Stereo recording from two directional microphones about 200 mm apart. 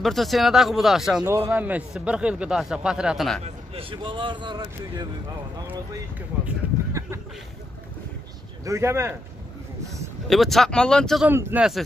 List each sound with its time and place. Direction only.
0.0 s speech: centre (ahead or behind)
3.4 s speech: 25° right (ahead or behind)
6.4 s a sound: 15° right (ahead or behind)
8.6 s speech: 15° right (ahead or behind)
10.2 s speech: centre (ahead or behind)
11.2 s speech: 10° right (ahead or behind)